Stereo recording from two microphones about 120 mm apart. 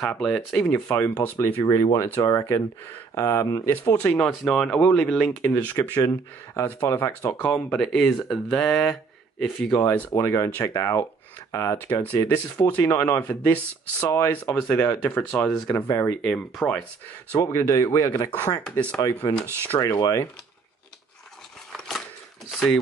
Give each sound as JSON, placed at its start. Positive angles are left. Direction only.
{"t": 0.2, "sound": "speech", "side_deg": 5}
{"t": 0.9, "sound": "speech", "side_deg": 20}
{"t": 7.4, "sound": "speech", "side_deg": 5}
{"t": 10.1, "sound": "speech", "side_deg": 25}
{"t": 15.6, "sound": "speech", "side_deg": 25}
{"t": 16.3, "sound": "speech", "side_deg": 5}
{"t": 17.4, "sound": "speech", "side_deg": 25}
{"t": 18.6, "sound": "speech", "side_deg": 10}
{"t": 19.9, "sound": "speech", "side_deg": 30}
{"t": 21.7, "sound": "a sound", "side_deg": 5}